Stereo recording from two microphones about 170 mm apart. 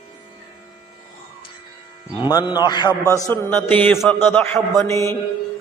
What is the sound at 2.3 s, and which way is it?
Speech, 25° left (ahead or behind).